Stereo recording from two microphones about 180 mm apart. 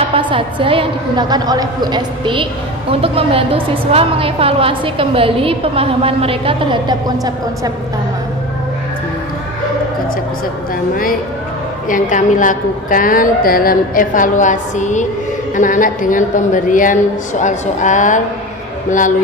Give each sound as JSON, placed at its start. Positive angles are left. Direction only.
{"t": 0.1, "sound": "a woman's voice", "side_deg": -30}
{"t": 11.9, "sound": "a woman's voice", "side_deg": 45}